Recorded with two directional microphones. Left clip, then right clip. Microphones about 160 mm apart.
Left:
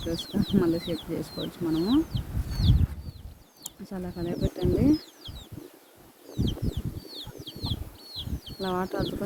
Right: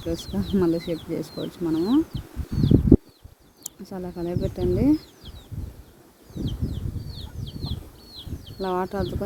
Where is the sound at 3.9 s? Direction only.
10° right (ahead or behind).